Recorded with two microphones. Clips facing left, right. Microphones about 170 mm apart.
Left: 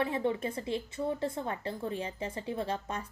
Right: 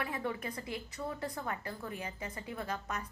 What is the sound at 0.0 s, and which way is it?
A woman's voice, 25° left (ahead or behind).